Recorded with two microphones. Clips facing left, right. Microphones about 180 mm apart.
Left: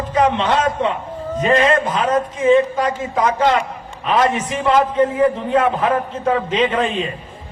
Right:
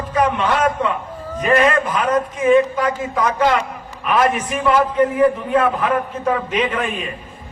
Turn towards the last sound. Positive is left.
turn(degrees=25)  # may be behind; listen again after turning